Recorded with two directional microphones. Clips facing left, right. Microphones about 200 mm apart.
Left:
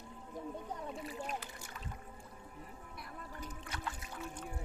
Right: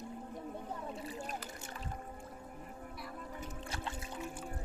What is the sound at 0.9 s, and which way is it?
Boat, 30° right (ahead or behind).